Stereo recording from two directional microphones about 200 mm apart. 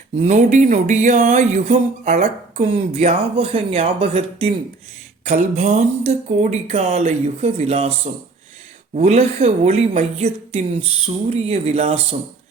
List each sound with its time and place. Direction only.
0.2 s speech: 35° right (ahead or behind)
9.0 s speech: 30° right (ahead or behind)